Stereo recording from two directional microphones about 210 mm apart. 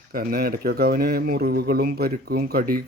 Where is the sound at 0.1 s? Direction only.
45° right (ahead or behind).